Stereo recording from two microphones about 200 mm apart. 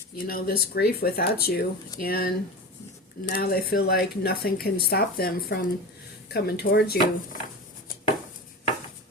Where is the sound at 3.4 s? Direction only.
50° left (ahead or behind).